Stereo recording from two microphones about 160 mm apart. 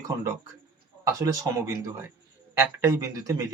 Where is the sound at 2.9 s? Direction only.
20° right (ahead or behind).